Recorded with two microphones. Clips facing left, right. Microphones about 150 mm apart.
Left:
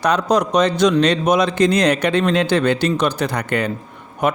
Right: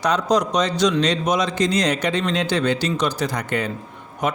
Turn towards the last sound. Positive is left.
turn(degrees=60)  # may be behind; listen again after turning